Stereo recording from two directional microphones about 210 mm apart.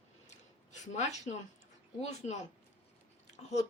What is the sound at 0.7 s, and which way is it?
Speech, 35° left (ahead or behind).